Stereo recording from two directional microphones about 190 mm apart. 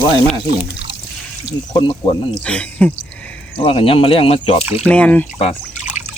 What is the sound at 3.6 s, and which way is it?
Speech, 30° left (ahead or behind).